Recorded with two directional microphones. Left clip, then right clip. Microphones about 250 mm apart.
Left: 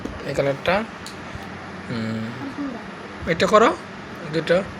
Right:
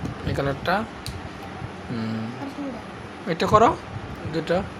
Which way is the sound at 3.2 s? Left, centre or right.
Centre.